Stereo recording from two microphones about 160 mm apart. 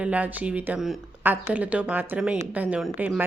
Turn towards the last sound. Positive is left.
turn(degrees=-10)  # may be behind; listen again after turning